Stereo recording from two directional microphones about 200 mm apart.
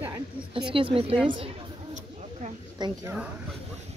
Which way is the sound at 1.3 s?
30° right (ahead or behind).